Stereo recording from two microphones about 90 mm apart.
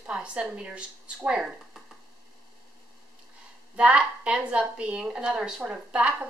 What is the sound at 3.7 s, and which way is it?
Speech, 15° right (ahead or behind).